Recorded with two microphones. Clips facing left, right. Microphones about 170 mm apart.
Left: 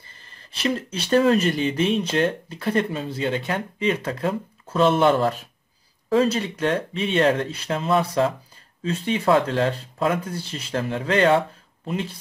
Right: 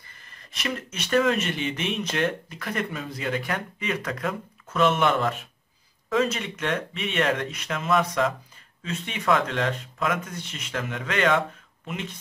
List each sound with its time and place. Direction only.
0.1 s speech: 30° left (ahead or behind)